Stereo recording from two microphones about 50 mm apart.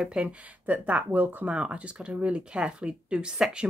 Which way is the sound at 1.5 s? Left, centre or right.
Right.